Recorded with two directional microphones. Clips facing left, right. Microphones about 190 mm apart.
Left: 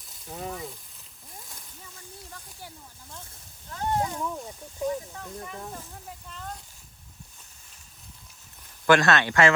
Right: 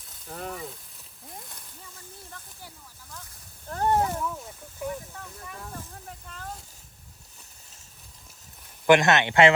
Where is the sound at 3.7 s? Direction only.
50° right (ahead or behind).